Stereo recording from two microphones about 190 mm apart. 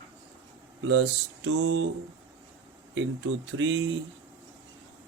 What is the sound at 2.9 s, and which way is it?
Mantra, 90° right.